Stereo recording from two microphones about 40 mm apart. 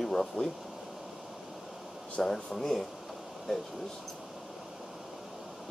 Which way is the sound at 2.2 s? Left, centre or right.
Centre.